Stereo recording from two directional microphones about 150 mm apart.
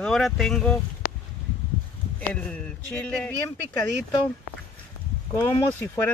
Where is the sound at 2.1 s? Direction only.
10° left (ahead or behind).